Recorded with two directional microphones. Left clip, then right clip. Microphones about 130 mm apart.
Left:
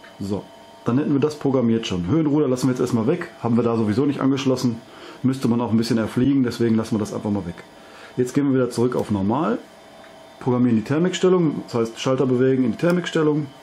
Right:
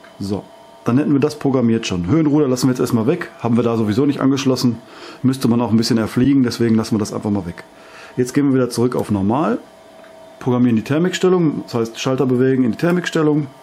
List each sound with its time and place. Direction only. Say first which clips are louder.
0.8 s a man's voice: right 4 dB; 35° right (ahead or behind)